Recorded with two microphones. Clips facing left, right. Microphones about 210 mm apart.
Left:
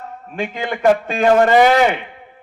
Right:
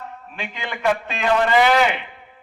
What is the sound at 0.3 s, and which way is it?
A man's voice, 45° left (ahead or behind).